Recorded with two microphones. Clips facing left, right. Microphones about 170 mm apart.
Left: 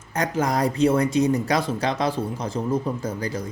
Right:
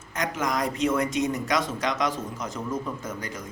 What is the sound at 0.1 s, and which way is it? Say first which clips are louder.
Speech: left 5 dB; 35° left (ahead or behind).